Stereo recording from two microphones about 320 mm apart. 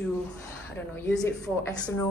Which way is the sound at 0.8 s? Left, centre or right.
Centre.